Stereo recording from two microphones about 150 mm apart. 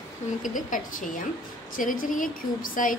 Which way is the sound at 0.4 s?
60° left (ahead or behind).